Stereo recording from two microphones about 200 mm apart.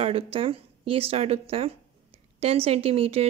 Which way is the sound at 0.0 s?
30° right (ahead or behind).